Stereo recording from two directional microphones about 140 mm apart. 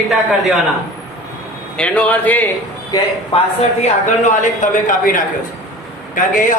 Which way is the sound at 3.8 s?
60° left (ahead or behind).